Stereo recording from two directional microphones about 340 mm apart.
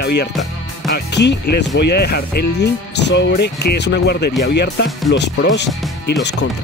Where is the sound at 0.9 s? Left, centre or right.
Left.